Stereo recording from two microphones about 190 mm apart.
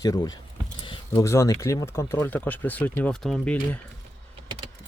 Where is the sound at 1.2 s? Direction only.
15° left (ahead or behind).